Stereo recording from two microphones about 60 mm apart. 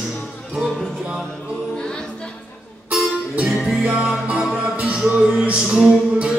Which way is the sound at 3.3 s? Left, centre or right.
Right.